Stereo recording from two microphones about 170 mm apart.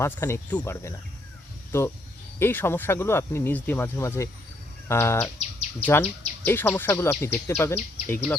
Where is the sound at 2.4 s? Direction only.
15° left (ahead or behind).